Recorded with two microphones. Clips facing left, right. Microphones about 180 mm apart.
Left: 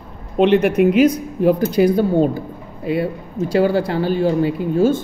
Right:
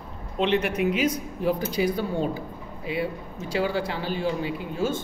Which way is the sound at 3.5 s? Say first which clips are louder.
Left 9 dB; 40° left (ahead or behind).